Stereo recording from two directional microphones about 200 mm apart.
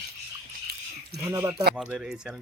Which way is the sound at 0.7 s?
50° right (ahead or behind).